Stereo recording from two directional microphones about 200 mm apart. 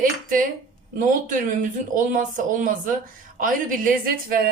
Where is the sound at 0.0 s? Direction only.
45° right (ahead or behind).